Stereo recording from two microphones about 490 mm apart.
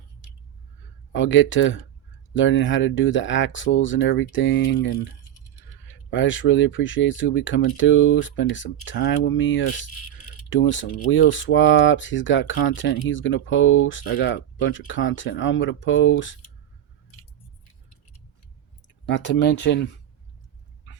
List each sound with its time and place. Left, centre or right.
1.1 s speech: left
6.1 s speech: left
19.0 s speech: left